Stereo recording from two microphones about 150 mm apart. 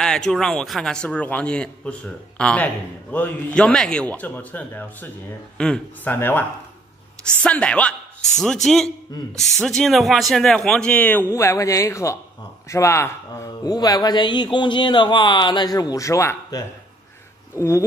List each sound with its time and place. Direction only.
0.0 s speech: 5° left (ahead or behind)
7.4 s speech: 10° left (ahead or behind)